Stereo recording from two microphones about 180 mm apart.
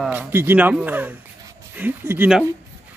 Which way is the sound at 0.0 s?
10° right (ahead or behind).